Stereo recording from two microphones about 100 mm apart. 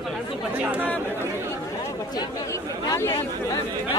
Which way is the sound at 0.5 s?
15° right (ahead or behind).